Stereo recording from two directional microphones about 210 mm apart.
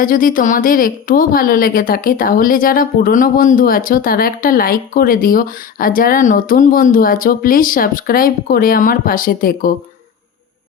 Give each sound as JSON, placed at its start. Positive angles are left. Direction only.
{"t": 0.0, "sound": "a woman's voice", "side_deg": 40}